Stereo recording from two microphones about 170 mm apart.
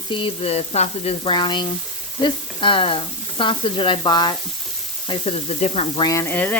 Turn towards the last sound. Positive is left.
turn(degrees=10)  # may be behind; listen again after turning